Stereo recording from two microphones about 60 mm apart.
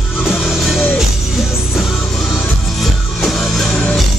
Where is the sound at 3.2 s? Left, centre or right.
Centre.